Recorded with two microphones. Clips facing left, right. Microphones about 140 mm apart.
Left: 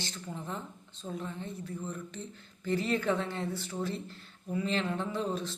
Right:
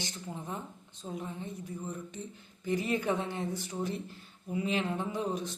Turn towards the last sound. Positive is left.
turn(degrees=-15)  # may be behind; listen again after turning